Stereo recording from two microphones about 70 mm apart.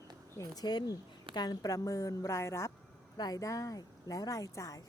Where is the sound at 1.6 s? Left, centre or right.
Left.